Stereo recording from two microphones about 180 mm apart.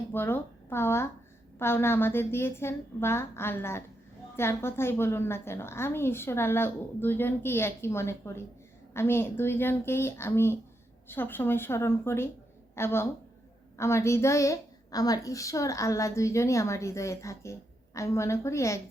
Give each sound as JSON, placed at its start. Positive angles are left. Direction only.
{"t": 0.1, "sound": "a woman's voice", "side_deg": 10}